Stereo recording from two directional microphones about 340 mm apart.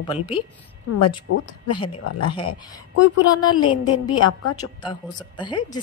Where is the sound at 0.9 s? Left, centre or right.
Left.